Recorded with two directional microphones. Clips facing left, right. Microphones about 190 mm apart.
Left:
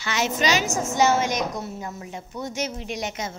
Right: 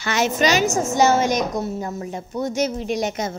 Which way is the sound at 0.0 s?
50° right (ahead or behind).